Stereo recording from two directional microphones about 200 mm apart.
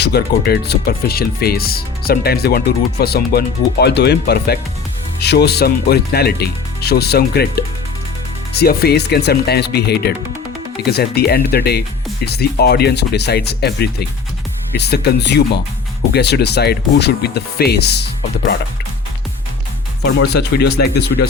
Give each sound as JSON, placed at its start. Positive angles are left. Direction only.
{"t": 0.0, "sound": "speech", "side_deg": 50}
{"t": 20.1, "sound": "speech", "side_deg": 55}